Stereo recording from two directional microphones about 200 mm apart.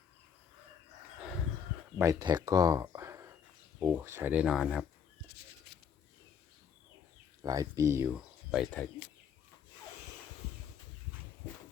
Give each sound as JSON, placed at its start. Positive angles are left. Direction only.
{"t": 2.0, "sound": "speech", "side_deg": -15}
{"t": 7.4, "sound": "speech", "side_deg": -15}